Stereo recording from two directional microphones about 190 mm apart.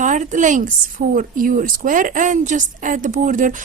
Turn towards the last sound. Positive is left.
turn(degrees=-45)  # may be behind; listen again after turning